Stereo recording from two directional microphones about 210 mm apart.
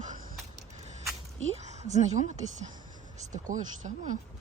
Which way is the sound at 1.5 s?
30° right (ahead or behind).